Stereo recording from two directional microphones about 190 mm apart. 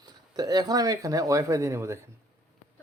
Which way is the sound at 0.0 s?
20° right (ahead or behind).